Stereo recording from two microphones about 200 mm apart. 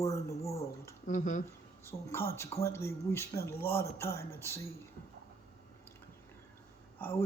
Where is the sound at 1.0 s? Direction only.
40° left (ahead or behind).